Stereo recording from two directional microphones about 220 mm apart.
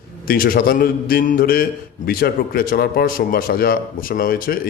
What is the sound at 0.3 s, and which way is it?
A man's voice, 40° left (ahead or behind).